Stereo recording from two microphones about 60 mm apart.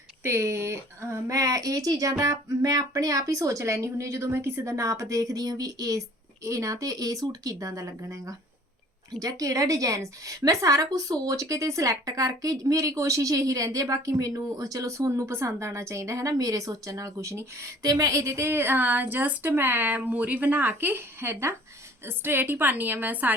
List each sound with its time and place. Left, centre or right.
0.2 s speech: right
2.1 s speech: right
6.4 s a woman's voice: right
9.2 s a woman's voice: right
17.8 s a woman's voice: right